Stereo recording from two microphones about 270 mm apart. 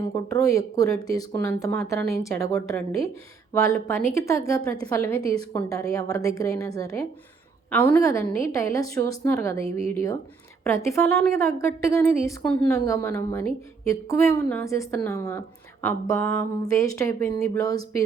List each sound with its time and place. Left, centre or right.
0.3 s a woman's voice: centre
9.6 s speech: right
9.9 s a woman's voice: centre